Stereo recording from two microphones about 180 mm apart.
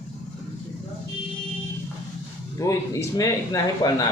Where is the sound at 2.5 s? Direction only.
15° left (ahead or behind).